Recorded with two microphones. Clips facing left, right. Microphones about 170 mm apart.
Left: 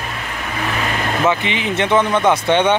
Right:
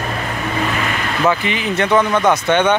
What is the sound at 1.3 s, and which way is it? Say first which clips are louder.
Speech: right 4 dB; 25° left (ahead or behind).